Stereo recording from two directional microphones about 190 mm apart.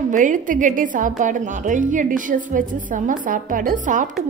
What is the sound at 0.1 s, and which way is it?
A woman's voice, 45° right (ahead or behind).